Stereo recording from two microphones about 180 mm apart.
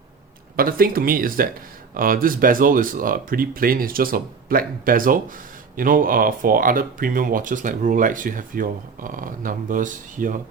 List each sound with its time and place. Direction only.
0.5 s speech: 55° right (ahead or behind)